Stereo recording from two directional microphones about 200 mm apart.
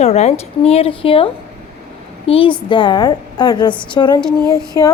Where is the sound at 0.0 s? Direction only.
35° left (ahead or behind).